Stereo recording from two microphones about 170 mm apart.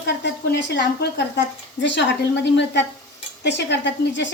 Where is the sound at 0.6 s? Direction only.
90° left.